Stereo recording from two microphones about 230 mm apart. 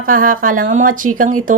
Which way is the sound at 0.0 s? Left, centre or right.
Right.